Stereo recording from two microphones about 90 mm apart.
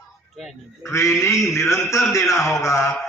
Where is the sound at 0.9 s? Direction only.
30° left (ahead or behind).